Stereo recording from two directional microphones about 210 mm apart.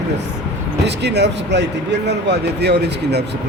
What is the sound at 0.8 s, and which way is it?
Speech, 55° right (ahead or behind).